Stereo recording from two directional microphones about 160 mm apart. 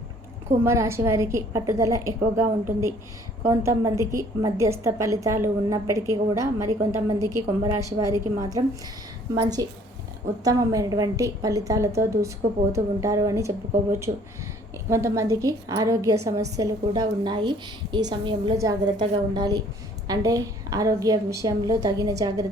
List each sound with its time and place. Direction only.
0.6 s a woman's voice: 15° right (ahead or behind)